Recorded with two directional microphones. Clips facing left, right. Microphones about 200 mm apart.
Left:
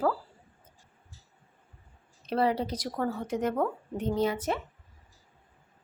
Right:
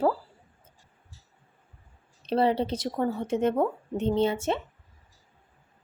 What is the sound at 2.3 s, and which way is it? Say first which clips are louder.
Speech: right 3 dB; 30° right (ahead or behind).